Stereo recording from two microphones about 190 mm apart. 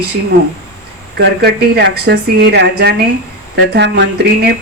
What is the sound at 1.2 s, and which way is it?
A woman's voice, 55° right (ahead or behind).